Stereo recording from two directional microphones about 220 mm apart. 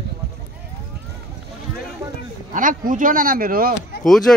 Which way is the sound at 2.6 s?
35° right (ahead or behind).